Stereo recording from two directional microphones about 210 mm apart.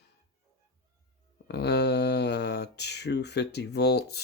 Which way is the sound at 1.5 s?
50° left (ahead or behind).